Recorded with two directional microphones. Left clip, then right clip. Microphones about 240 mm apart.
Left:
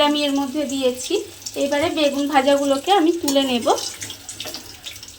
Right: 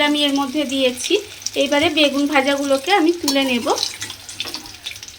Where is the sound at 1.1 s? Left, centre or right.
Centre.